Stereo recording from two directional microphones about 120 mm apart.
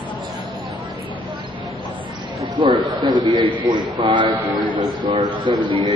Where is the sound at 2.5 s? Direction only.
40° right (ahead or behind).